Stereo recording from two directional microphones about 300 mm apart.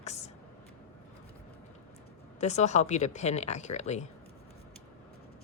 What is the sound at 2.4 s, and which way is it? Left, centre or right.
A woman's voice, left.